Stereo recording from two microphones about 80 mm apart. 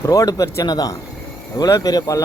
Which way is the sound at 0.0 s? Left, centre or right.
Left.